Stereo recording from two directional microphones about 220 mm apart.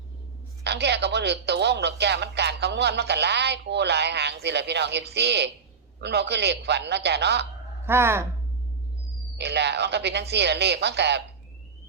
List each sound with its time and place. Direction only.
0.6 s speech: 50° right (ahead or behind)
7.9 s speech: 10° right (ahead or behind)
9.4 s speech: 50° right (ahead or behind)